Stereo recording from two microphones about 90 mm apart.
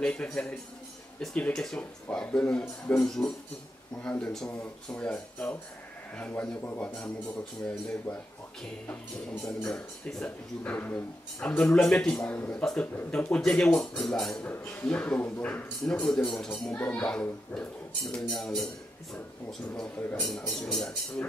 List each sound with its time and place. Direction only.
0.0 s speech: 10° left (ahead or behind)
7.6 s speech: 10° left (ahead or behind)
9.4 s speech: 5° left (ahead or behind)
14.5 s speech: 20° left (ahead or behind); by 18.7 s 5° left (ahead or behind)
20.0 s speech: 20° left (ahead or behind)
20.2 s speech: 5° left (ahead or behind)